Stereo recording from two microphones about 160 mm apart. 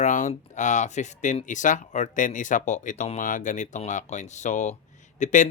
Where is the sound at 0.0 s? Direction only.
55° left (ahead or behind).